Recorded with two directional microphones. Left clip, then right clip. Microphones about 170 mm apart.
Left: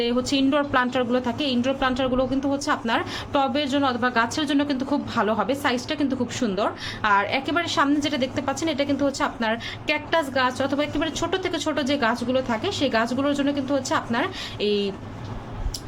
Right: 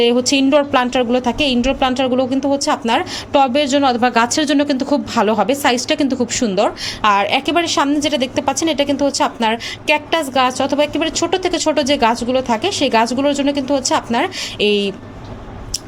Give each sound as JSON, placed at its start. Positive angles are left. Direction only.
{"t": 0.0, "sound": "a woman's voice", "side_deg": -30}